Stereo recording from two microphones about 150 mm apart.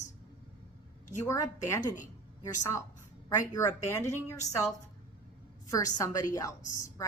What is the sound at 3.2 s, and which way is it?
A woman's voice, 25° left (ahead or behind).